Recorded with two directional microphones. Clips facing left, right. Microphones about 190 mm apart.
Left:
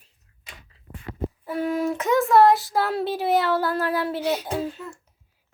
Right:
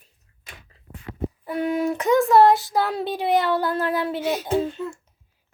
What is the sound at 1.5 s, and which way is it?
Child singing, centre (ahead or behind).